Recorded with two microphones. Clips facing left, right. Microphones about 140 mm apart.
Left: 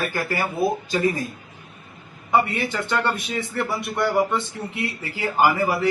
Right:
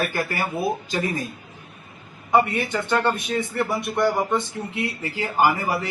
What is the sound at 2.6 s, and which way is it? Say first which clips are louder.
A man's voice: right 1 dB; 15° right (ahead or behind).